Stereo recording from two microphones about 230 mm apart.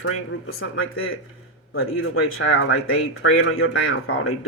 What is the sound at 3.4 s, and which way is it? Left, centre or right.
Speech, left.